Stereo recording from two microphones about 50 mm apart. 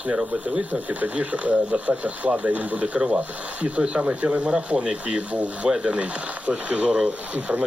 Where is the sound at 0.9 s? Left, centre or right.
Right.